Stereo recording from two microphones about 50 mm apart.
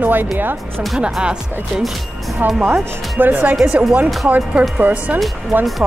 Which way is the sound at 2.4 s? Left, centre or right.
Right.